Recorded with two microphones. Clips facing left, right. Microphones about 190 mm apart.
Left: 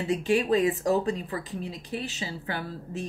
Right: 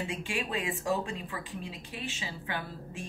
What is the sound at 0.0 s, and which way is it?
Speech, 40° left (ahead or behind).